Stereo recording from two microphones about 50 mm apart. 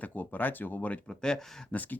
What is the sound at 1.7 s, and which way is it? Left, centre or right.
Speech, left.